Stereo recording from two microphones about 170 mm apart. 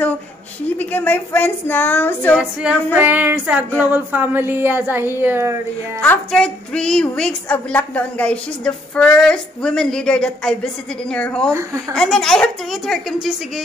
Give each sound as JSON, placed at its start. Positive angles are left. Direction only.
{"t": 0.7, "sound": "speech", "side_deg": 10}
{"t": 2.6, "sound": "a woman's voice", "side_deg": -5}
{"t": 3.0, "sound": "a sound", "side_deg": -10}
{"t": 5.9, "sound": "a woman's voice", "side_deg": 5}